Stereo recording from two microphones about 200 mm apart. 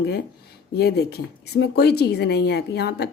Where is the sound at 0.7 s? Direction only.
55° left (ahead or behind).